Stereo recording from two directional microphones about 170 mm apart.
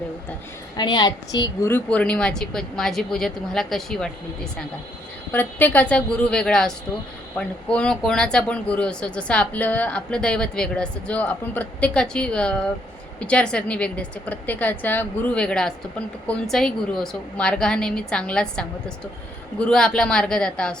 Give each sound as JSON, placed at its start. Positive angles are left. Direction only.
{"t": 0.8, "sound": "a woman's voice", "side_deg": 25}
{"t": 1.7, "sound": "a woman's voice", "side_deg": 10}
{"t": 5.3, "sound": "a woman's voice", "side_deg": 10}